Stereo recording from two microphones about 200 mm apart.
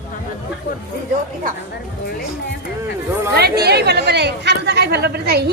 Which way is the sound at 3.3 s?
55° right (ahead or behind).